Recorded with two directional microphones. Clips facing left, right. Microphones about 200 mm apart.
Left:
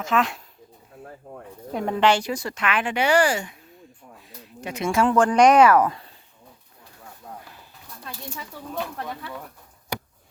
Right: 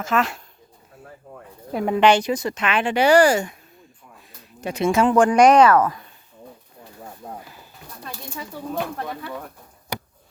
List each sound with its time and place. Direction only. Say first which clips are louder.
0.0 s speech: right 1 dB; centre (ahead or behind)
1.7 s speech: right 4 dB; 5° right (ahead or behind)
2.0 s speech: right 4 dB; 20° right (ahead or behind); by 3.5 s 45° right (ahead or behind)
4.6 s speech: right 5 dB; 35° right (ahead or behind)
4.9 s speech: right 3 dB; 20° right (ahead or behind)
5.5 s speech: right 1 dB; 10° left (ahead or behind)
7.4 s a sound: right 2 dB; centre (ahead or behind)